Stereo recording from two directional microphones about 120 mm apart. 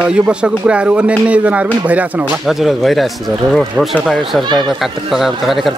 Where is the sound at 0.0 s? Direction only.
10° right (ahead or behind).